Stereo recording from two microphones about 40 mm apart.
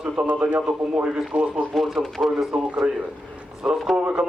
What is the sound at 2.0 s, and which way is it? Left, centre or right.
Speech, centre.